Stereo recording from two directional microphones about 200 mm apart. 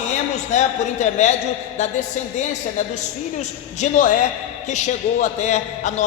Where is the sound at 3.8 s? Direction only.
40° left (ahead or behind).